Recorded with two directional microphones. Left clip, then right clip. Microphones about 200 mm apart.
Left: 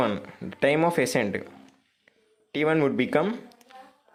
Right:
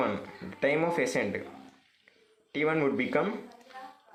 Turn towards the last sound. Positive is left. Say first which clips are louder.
# left 4 dB
turn(degrees=40)  # may be behind; listen again after turning